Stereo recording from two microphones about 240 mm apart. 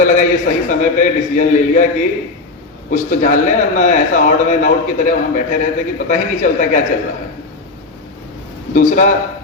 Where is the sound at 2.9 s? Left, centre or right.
Left.